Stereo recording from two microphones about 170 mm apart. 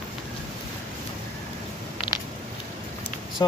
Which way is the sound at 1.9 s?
25° left (ahead or behind).